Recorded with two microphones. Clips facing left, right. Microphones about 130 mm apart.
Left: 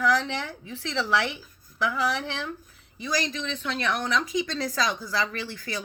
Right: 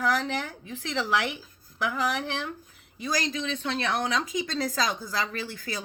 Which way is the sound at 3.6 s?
40° right (ahead or behind).